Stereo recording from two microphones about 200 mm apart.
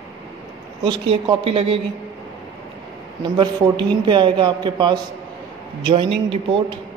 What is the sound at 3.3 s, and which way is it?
A man's voice, 25° right (ahead or behind).